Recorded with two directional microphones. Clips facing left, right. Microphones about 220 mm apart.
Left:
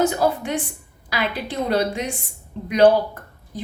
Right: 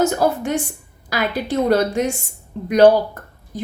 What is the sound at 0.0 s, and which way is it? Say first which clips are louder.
A woman's voice: right 2 dB; 45° right (ahead or behind).